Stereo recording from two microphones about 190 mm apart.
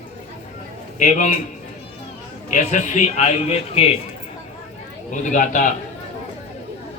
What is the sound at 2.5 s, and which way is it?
A man's voice, 40° left (ahead or behind).